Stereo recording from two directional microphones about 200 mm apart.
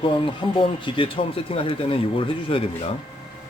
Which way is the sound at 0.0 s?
25° left (ahead or behind).